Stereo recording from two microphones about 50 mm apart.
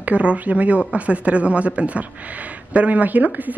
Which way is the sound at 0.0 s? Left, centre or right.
Right.